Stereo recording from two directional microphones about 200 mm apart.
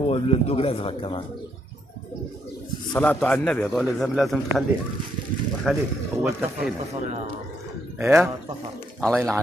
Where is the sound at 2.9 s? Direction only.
5° left (ahead or behind).